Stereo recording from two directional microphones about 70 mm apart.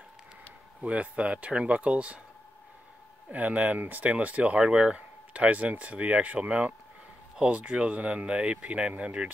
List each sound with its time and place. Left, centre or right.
0.7 s speech: centre
3.3 s speech: right